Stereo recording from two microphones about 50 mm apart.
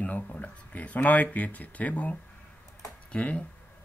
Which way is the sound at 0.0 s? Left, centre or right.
Left.